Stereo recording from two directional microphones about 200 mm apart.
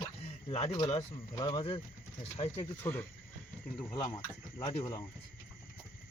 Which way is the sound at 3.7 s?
25° left (ahead or behind).